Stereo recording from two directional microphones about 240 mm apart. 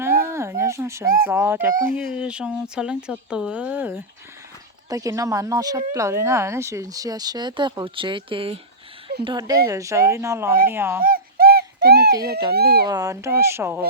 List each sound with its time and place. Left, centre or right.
0.3 s a sound: centre
1.2 s speech: centre
1.7 s speech: right
2.1 s speech: centre
11.0 s a sound: right
12.2 s speech: right
12.9 s speech: centre